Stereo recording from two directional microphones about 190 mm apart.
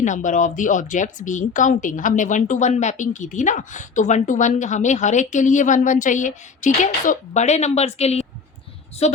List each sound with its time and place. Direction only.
0.0 s a woman's voice: 40° left (ahead or behind)